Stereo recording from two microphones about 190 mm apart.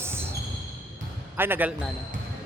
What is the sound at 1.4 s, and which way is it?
Speech, 10° right (ahead or behind).